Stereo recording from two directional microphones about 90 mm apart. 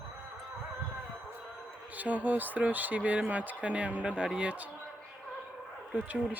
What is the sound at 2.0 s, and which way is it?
Speech, 15° right (ahead or behind).